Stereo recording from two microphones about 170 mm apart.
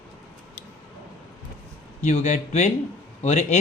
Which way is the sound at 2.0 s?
45° left (ahead or behind).